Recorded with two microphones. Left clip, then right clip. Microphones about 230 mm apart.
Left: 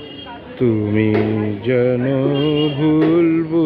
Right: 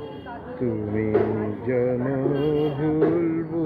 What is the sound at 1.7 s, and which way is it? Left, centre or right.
Music, left.